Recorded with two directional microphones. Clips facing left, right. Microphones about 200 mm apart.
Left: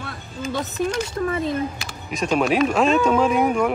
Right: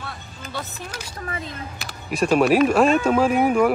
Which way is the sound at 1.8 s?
5° right (ahead or behind).